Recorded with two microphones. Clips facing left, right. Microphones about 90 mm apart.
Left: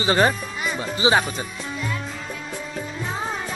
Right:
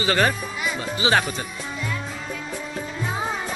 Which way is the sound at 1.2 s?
10° left (ahead or behind).